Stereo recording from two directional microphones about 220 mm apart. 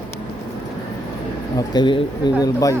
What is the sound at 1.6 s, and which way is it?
A man's voice, 20° left (ahead or behind).